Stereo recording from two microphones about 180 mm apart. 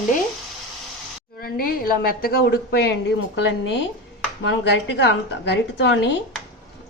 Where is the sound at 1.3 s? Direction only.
55° left (ahead or behind); by 6.2 s 75° left (ahead or behind).